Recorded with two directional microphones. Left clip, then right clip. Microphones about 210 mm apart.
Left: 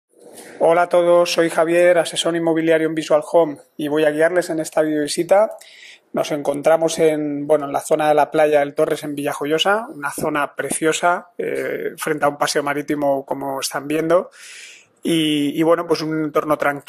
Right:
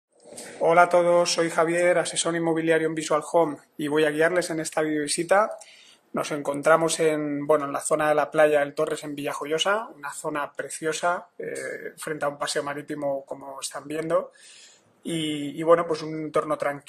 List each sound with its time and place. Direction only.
0.6 s a man's voice: 30° left (ahead or behind)